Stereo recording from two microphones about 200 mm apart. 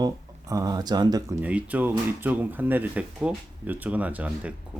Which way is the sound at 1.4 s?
5° right (ahead or behind).